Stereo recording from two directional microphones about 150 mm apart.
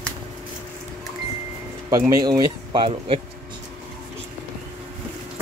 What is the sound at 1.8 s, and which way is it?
Speech, 25° right (ahead or behind).